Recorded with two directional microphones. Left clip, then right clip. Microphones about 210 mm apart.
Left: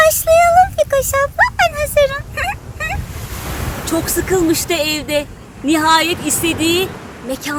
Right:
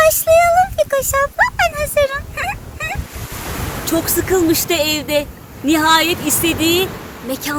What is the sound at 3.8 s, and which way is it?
Speech, centre (ahead or behind).